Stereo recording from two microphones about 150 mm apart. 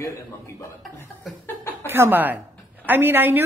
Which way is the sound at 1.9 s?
15° right (ahead or behind).